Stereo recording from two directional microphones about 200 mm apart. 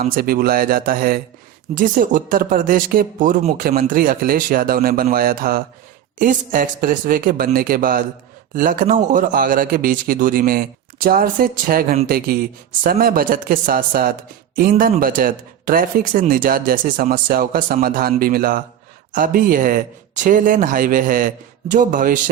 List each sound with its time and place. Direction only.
0.0 s speech: 45° right (ahead or behind)